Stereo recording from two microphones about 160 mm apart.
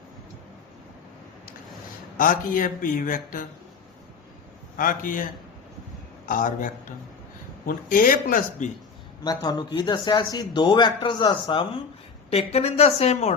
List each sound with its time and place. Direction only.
2.1 s speech: 60° left (ahead or behind)
4.8 s speech: 60° left (ahead or behind)
7.7 s speech: 60° left (ahead or behind)
9.2 s speech: 25° left (ahead or behind)
12.3 s a woman's voice: 40° left (ahead or behind)